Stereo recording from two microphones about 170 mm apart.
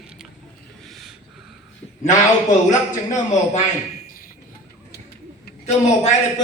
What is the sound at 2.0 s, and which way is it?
A man's voice, 45° left (ahead or behind).